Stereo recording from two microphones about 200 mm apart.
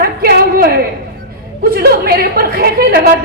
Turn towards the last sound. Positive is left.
turn(degrees=-50)  # may be behind; listen again after turning